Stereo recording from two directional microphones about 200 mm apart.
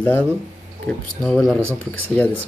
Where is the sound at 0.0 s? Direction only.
5° left (ahead or behind).